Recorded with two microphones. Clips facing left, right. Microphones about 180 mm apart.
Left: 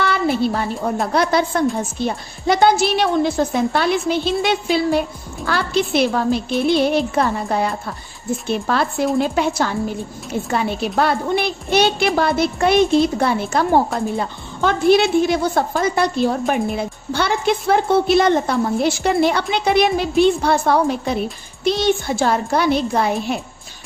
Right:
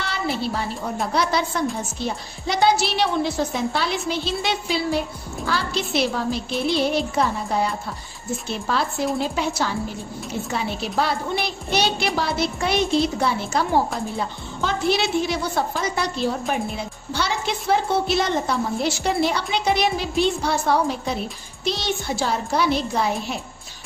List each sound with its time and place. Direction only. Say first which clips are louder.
0.0 s a woman's voice: left 8 dB; 55° left (ahead or behind)